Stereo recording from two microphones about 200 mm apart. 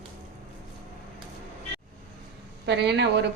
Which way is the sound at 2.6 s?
60° right (ahead or behind).